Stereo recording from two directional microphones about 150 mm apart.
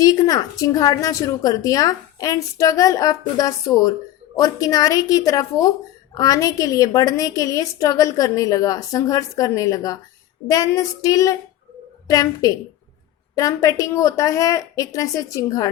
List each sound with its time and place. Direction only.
0.0 s a woman's voice: 25° left (ahead or behind)